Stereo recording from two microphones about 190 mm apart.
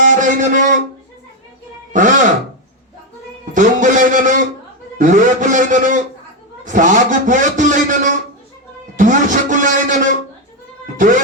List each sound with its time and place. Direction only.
0.0 s a man's voice: 40° right (ahead or behind)
1.9 s speech: 40° right (ahead or behind)
3.5 s a man's voice: 40° right (ahead or behind)